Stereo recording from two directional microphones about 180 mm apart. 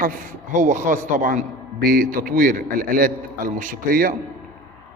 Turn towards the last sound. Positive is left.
turn(degrees=-50)  # may be behind; listen again after turning